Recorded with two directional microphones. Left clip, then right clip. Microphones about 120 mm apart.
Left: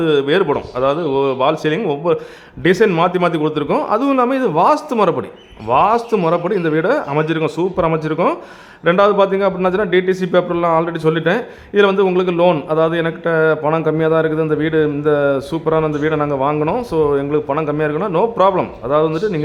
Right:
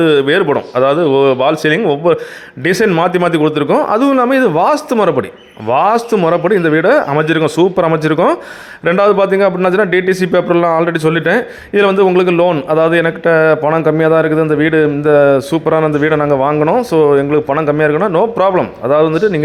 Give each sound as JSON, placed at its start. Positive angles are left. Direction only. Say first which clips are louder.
{"t": 0.0, "sound": "a man's voice", "louder": "right 4 dB", "side_deg": -25}
{"t": 16.9, "sound": "a man's voice", "louder": "right 5 dB", "side_deg": -30}